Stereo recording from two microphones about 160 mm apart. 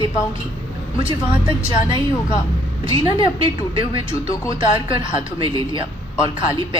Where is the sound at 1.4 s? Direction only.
30° right (ahead or behind).